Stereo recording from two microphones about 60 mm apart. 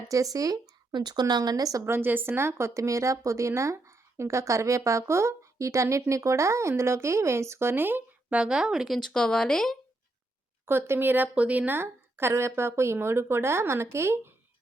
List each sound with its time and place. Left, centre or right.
0.1 s speech: right
1.8 s speech: right
8.3 s speech: centre
9.0 s speech: centre
10.7 s speech: right
11.8 s speech: right